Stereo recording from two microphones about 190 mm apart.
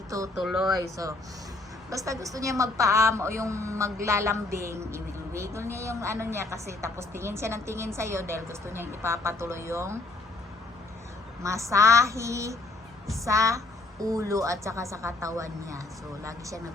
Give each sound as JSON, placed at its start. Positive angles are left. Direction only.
{"t": 0.3, "sound": "speech", "side_deg": 0}
{"t": 0.8, "sound": "speech", "side_deg": -20}
{"t": 11.4, "sound": "speech", "side_deg": -15}